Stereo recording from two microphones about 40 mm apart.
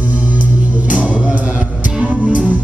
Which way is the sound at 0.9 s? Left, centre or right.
Right.